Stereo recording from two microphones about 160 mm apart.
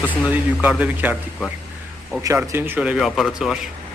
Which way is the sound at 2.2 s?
20° right (ahead or behind).